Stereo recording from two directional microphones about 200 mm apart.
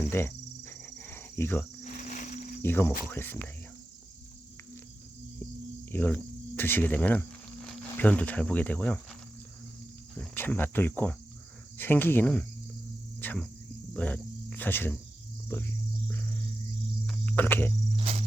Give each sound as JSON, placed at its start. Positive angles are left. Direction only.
{"t": 0.1, "sound": "wild animals", "side_deg": 10}
{"t": 0.9, "sound": "cricket", "side_deg": 10}
{"t": 1.8, "sound": "cricket", "side_deg": 35}
{"t": 2.6, "sound": "cricket", "side_deg": 10}
{"t": 5.9, "sound": "cricket", "side_deg": 10}
{"t": 6.6, "sound": "speech", "side_deg": 10}
{"t": 10.2, "sound": "cricket", "side_deg": 10}
{"t": 13.1, "sound": "speech", "side_deg": 10}
{"t": 13.9, "sound": "cricket", "side_deg": 10}
{"t": 17.1, "sound": "cricket", "side_deg": 10}
{"t": 17.9, "sound": "cricket", "side_deg": -30}